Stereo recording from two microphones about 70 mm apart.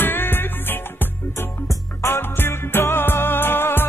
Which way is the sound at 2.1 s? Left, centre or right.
Left.